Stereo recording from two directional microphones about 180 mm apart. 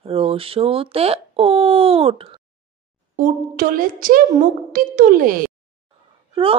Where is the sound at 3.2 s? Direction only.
50° right (ahead or behind).